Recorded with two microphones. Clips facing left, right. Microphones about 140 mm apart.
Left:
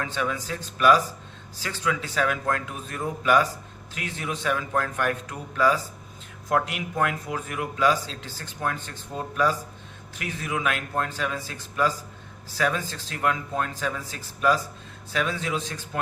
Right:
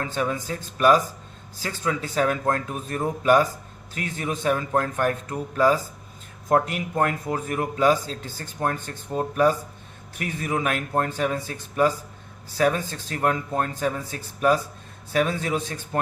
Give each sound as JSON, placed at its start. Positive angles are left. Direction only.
{"t": 0.0, "sound": "a man's voice", "side_deg": -40}